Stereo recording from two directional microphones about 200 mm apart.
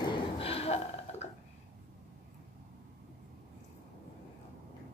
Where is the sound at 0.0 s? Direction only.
30° left (ahead or behind).